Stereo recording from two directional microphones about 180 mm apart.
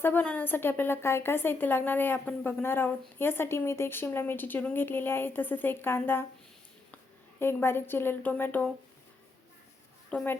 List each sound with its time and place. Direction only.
0.0 s a woman's voice: 10° left (ahead or behind)
7.3 s a woman's voice: 15° left (ahead or behind)
10.1 s speech: 5° left (ahead or behind)